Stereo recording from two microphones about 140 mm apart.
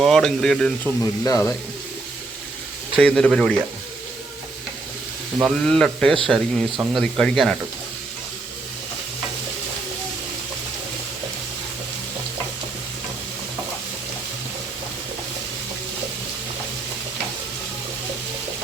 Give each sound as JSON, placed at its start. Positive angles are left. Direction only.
{"t": 0.0, "sound": "speech", "side_deg": 5}
{"t": 1.2, "sound": "speech", "side_deg": 20}
{"t": 3.0, "sound": "speech", "side_deg": 5}
{"t": 5.4, "sound": "speech", "side_deg": 0}